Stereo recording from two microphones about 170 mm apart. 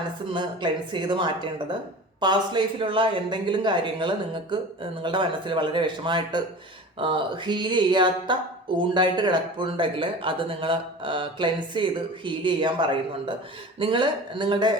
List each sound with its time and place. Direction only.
0.3 s speech: 25° right (ahead or behind)